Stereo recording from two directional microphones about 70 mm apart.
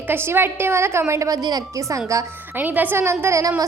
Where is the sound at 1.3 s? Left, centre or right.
Right.